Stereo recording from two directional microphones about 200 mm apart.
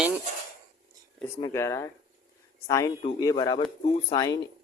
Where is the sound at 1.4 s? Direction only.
15° left (ahead or behind).